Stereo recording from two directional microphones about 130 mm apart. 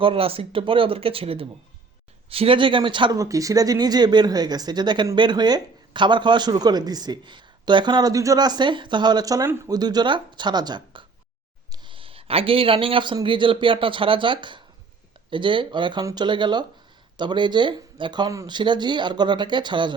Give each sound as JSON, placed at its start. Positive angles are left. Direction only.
{"t": 0.0, "sound": "speech", "side_deg": -45}
{"t": 3.2, "sound": "speech", "side_deg": -25}
{"t": 9.7, "sound": "a man's voice", "side_deg": -30}